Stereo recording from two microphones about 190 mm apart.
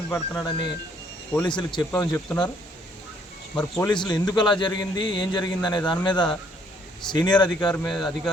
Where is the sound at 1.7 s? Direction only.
20° left (ahead or behind).